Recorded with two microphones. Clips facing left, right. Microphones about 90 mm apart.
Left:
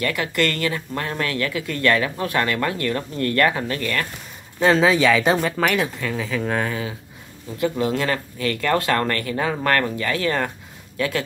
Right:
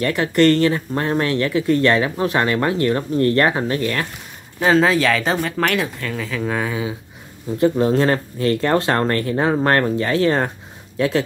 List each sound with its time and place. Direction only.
0.0 s speech: 35° right (ahead or behind)
4.6 s speech: centre (ahead or behind)
7.5 s speech: 35° right (ahead or behind)